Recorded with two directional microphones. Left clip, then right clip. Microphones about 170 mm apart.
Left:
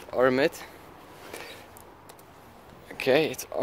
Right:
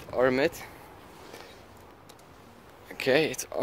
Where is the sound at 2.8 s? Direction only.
10° left (ahead or behind).